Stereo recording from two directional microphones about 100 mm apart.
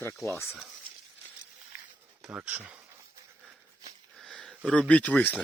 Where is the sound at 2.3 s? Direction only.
15° right (ahead or behind).